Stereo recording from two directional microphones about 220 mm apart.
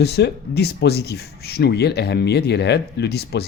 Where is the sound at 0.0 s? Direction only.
50° left (ahead or behind).